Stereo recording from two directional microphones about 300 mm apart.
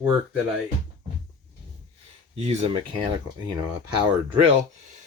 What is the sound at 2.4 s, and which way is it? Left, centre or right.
Speech, centre.